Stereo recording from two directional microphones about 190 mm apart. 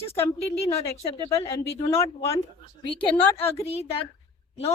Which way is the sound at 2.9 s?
30° left (ahead or behind).